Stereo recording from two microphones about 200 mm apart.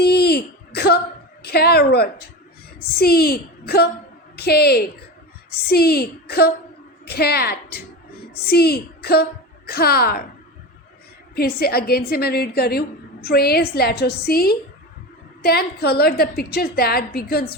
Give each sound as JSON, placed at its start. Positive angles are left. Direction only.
{"t": 0.0, "sound": "a sound", "side_deg": 50}
{"t": 3.0, "sound": "a woman's voice", "side_deg": 50}
{"t": 11.3, "sound": "a woman's voice", "side_deg": 50}